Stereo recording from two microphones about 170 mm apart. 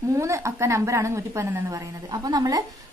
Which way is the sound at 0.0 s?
15° right (ahead or behind).